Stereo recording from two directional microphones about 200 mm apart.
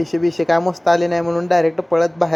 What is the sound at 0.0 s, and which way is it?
Speech, centre (ahead or behind).